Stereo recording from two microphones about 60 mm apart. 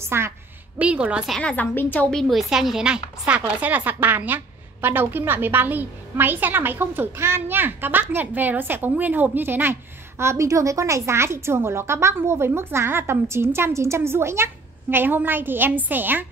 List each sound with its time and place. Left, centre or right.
0.0 s a woman's voice: right
0.7 s speech: right
1.4 s a woman's voice: left
2.0 s a woman's voice: centre
2.3 s a woman's voice: centre; by 15.0 s right
15.0 s a woman's voice: right